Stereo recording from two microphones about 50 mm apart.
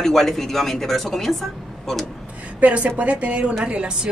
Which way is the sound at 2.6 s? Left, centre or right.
Right.